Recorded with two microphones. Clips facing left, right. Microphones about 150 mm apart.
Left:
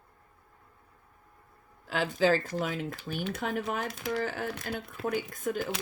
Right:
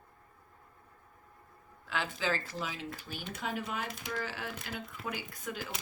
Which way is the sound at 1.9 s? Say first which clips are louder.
Left 8 dB; 40° left (ahead or behind).